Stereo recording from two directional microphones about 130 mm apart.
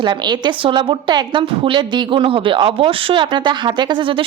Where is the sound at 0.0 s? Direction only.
35° right (ahead or behind).